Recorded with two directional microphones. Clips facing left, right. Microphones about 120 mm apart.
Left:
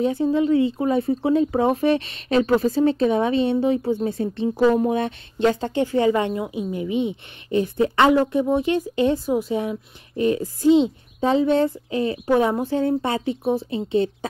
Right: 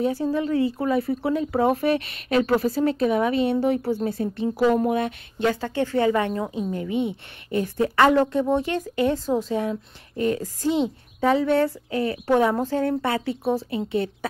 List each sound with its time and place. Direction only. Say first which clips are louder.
0.2 s a woman's voice: left 4 dB; 20° left (ahead or behind)